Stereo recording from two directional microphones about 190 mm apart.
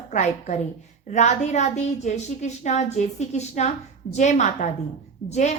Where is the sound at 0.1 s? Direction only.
40° left (ahead or behind).